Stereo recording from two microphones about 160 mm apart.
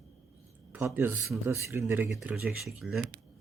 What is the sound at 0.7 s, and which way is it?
Speech, 15° right (ahead or behind).